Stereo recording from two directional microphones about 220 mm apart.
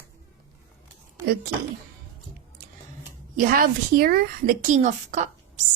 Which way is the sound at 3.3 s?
40° right (ahead or behind).